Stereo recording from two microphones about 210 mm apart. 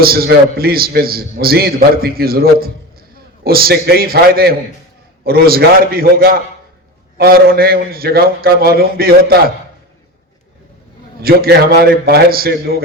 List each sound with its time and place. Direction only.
0.0 s a man's voice: 45° right (ahead or behind)
11.2 s a man's voice: 45° right (ahead or behind)